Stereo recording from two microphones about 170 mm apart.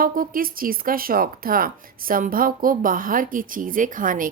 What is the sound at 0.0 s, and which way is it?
Speech, 55° right (ahead or behind).